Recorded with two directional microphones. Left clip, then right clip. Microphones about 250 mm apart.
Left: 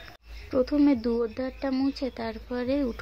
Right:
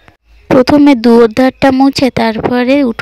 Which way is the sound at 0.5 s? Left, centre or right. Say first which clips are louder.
Right 17 dB; right.